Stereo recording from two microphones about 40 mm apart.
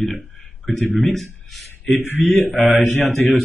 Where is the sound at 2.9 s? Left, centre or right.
Left.